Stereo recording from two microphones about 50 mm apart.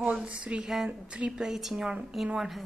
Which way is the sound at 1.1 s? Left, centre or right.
Right.